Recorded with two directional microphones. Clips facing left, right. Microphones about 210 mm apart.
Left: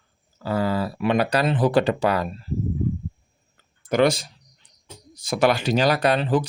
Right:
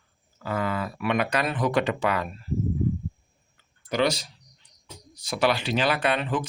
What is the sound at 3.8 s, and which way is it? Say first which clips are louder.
Speech: left 5 dB; 50° left (ahead or behind).